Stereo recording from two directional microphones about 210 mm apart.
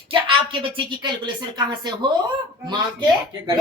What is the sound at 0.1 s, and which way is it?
A woman's voice, 25° right (ahead or behind).